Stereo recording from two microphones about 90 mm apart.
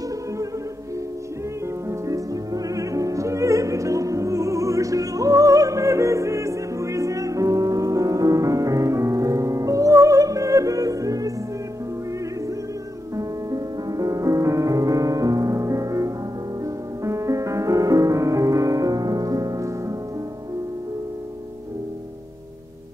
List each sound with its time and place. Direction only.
1.9 s music: 40° right (ahead or behind)
13.1 s music: 40° right (ahead or behind)